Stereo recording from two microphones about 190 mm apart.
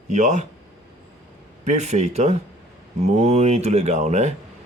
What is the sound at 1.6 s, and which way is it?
Speech, 35° right (ahead or behind).